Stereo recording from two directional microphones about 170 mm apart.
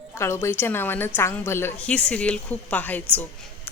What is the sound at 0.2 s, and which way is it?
Speech, 15° left (ahead or behind).